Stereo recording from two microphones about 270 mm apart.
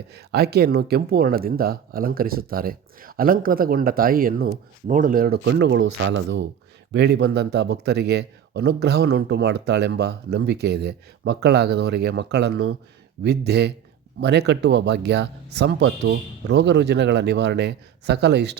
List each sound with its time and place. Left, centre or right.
0.1 s speech: right